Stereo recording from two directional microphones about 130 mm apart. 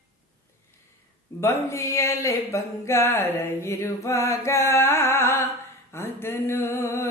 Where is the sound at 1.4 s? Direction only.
20° left (ahead or behind).